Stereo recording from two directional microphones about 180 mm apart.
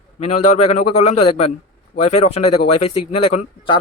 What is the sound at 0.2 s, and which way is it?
Speech, 35° left (ahead or behind).